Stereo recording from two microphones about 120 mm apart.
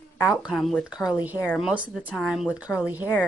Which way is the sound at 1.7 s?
10° right (ahead or behind).